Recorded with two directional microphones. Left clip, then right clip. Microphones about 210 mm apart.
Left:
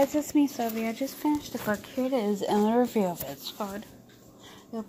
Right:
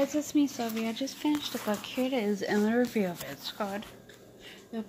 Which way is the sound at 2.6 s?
20° right (ahead or behind).